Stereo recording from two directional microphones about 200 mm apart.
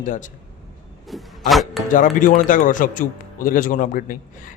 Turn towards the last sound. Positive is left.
turn(degrees=45)  # may be behind; listen again after turning